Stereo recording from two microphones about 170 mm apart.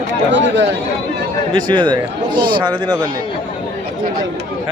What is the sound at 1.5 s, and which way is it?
Speech, 25° right (ahead or behind).